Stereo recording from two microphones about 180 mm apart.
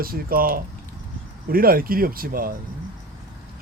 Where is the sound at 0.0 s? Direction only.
55° right (ahead or behind).